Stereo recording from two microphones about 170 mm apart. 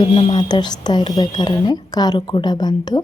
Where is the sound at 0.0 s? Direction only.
30° left (ahead or behind).